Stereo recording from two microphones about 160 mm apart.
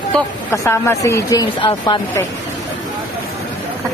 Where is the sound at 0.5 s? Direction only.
15° left (ahead or behind).